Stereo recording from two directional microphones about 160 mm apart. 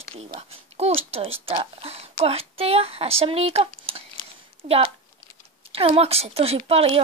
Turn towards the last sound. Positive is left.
turn(degrees=-40)  # may be behind; listen again after turning